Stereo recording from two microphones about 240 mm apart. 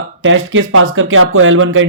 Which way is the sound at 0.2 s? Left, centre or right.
Right.